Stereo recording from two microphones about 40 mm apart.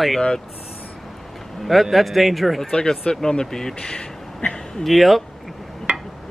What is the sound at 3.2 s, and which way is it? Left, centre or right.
Speech, centre.